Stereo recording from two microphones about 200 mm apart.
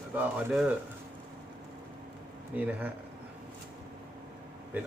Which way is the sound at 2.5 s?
10° right (ahead or behind).